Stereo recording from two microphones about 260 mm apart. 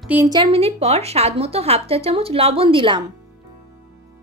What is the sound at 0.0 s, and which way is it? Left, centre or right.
A woman's voice, centre.